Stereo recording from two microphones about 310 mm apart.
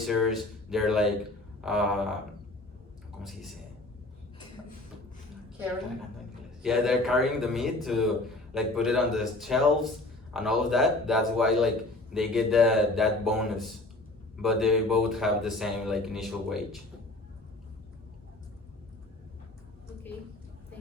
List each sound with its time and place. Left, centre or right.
0.0 s a man's voice: centre
3.2 s a man's voice: centre
6.6 s a man's voice: centre